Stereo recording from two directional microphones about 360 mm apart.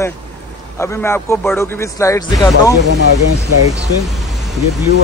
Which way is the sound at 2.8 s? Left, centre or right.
Right.